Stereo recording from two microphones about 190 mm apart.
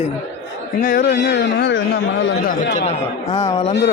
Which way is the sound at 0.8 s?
50° left (ahead or behind).